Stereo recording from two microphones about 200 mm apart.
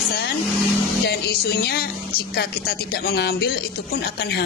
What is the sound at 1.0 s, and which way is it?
Speech, 50° left (ahead or behind).